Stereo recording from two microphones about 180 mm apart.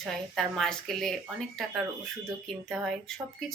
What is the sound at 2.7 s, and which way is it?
Speech, centre (ahead or behind).